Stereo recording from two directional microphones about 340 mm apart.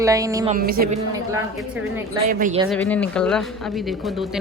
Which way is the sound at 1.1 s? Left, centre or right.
Centre.